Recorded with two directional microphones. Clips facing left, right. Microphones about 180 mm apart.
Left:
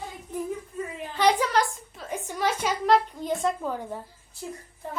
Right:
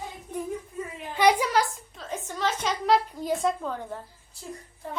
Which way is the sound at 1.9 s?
10° left (ahead or behind).